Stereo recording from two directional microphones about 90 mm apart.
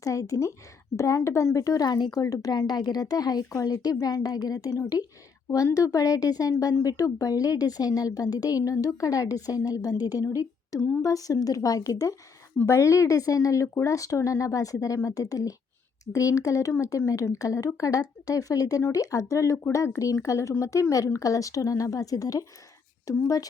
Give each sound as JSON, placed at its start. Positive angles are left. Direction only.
{"t": 0.0, "sound": "a woman's voice", "side_deg": 35}